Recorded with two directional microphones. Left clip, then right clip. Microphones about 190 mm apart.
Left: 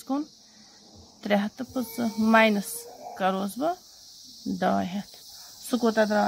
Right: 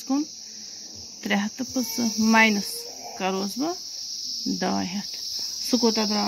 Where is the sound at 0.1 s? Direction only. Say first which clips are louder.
Right 4 dB; 35° left (ahead or behind).